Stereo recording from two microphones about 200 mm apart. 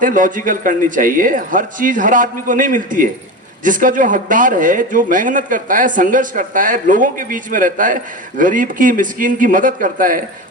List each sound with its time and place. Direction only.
0.0 s a man's voice: 40° right (ahead or behind)